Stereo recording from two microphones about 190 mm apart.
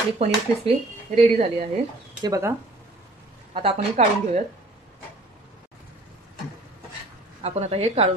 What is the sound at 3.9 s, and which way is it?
Speech, 40° right (ahead or behind).